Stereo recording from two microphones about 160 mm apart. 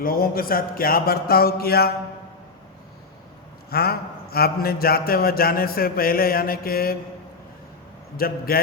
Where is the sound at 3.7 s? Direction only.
75° left (ahead or behind).